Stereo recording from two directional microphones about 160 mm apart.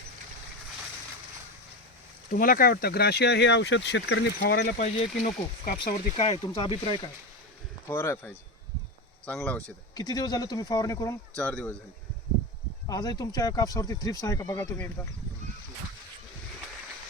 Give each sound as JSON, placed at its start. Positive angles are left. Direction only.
{"t": 2.3, "sound": "speech", "side_deg": 65}
{"t": 4.5, "sound": "speech", "side_deg": 55}
{"t": 5.7, "sound": "speech", "side_deg": 30}
{"t": 7.9, "sound": "speech", "side_deg": 15}
{"t": 9.9, "sound": "speech", "side_deg": 25}
{"t": 11.3, "sound": "speech", "side_deg": 5}
{"t": 12.9, "sound": "speech", "side_deg": 25}